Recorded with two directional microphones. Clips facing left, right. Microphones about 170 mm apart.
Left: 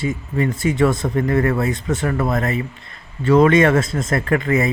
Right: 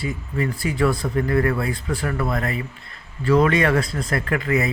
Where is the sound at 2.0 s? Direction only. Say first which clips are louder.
Left 4 dB; 45° left (ahead or behind).